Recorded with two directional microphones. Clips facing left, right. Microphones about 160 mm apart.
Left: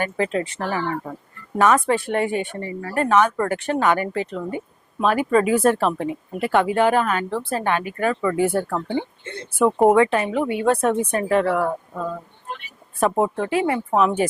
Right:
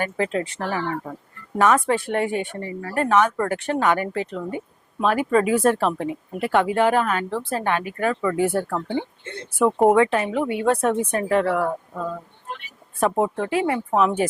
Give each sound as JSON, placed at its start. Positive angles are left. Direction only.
{"t": 0.0, "sound": "speech", "side_deg": 15}
{"t": 9.6, "sound": "speech", "side_deg": 30}
{"t": 10.0, "sound": "speech", "side_deg": 15}
{"t": 12.5, "sound": "a sound", "side_deg": 15}
{"t": 13.1, "sound": "speech", "side_deg": 25}